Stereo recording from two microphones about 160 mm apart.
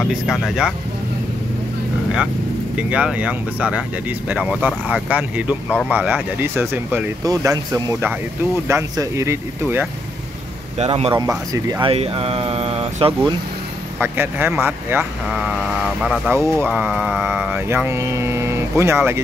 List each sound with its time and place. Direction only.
0.0 s speech: centre (ahead or behind)
2.9 s speech: 5° right (ahead or behind)
10.8 s speech: 35° right (ahead or behind)
11.1 s speech: 20° right (ahead or behind)
11.8 s speech: 35° right (ahead or behind)
13.9 s speech: 15° right (ahead or behind)